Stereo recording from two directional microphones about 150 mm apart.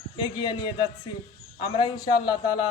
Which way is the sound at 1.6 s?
30° left (ahead or behind).